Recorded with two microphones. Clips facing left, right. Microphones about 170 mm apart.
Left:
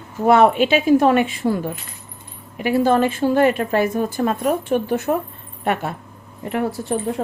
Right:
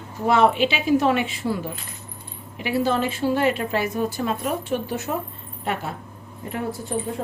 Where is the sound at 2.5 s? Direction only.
50° left (ahead or behind).